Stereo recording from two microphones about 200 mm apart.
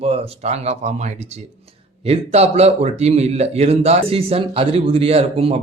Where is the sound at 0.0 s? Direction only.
30° right (ahead or behind).